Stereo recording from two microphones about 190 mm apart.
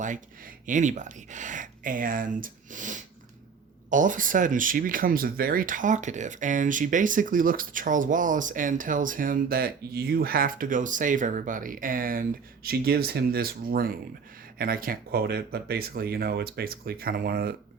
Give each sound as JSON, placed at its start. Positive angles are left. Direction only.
{"t": 0.6, "sound": "speech", "side_deg": -40}